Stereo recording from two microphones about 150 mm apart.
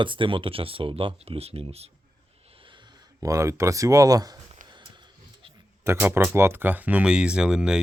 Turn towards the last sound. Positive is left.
turn(degrees=-5)  # may be behind; listen again after turning